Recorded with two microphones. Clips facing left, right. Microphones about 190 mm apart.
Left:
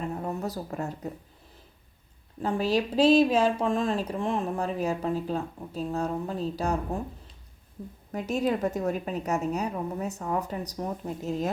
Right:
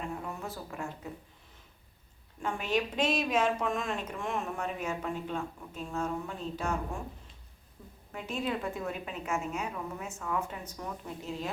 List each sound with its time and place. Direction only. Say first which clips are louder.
0.1 s speech: left 7 dB; 40° left (ahead or behind)
2.4 s speech: left 6 dB; 35° left (ahead or behind)